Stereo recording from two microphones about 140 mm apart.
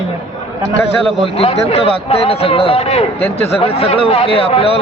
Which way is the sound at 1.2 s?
45° left (ahead or behind).